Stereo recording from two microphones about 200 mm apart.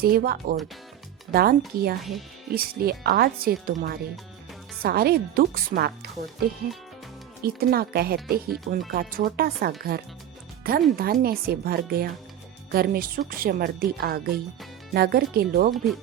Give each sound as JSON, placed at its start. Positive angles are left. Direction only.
{"t": 0.0, "sound": "speech", "side_deg": -50}
{"t": 2.0, "sound": "speech", "side_deg": 0}
{"t": 2.5, "sound": "speech", "side_deg": -50}
{"t": 7.4, "sound": "speech", "side_deg": -50}